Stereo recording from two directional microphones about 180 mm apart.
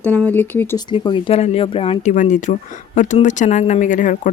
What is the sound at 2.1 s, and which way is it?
Speech, 45° left (ahead or behind).